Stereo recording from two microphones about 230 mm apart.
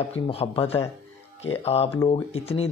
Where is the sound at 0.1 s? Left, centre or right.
Left.